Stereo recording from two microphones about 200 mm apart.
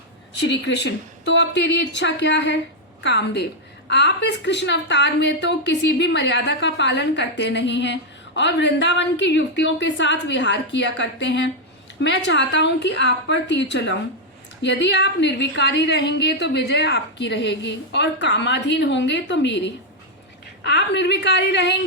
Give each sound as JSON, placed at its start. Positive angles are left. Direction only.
{"t": 0.3, "sound": "a woman's voice", "side_deg": 60}